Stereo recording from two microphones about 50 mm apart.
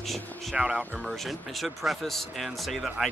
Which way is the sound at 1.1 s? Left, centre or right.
Centre.